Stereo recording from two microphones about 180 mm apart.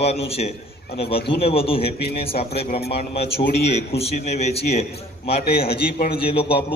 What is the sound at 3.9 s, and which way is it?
Mantra, 35° left (ahead or behind).